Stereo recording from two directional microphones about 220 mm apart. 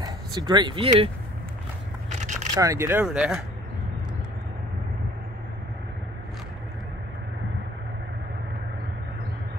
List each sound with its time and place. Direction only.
0.0 s speech: 20° right (ahead or behind)
2.0 s a sound: 35° right (ahead or behind)
2.5 s speech: 15° right (ahead or behind)